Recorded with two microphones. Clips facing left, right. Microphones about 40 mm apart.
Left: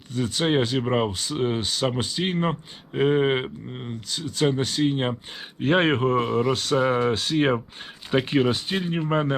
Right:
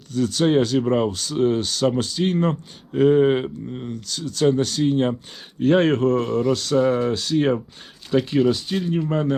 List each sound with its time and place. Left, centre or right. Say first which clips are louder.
0.1 s speech: right 4 dB; centre